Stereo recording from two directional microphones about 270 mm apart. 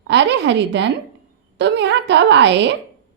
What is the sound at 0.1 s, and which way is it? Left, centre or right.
A woman's voice, right.